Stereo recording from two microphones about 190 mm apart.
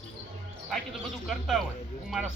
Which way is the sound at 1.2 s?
Centre (ahead or behind).